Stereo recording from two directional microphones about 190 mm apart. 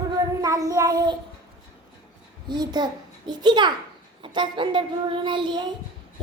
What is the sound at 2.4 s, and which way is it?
A child's voice, 20° right (ahead or behind).